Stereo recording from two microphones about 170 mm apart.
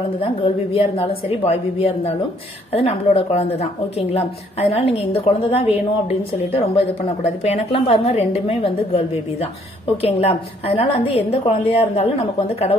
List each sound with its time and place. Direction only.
0.7 s a woman's voice: 35° left (ahead or behind)